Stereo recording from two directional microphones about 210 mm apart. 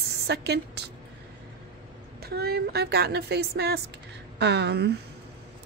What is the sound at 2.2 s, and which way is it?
A woman's voice, 50° right (ahead or behind).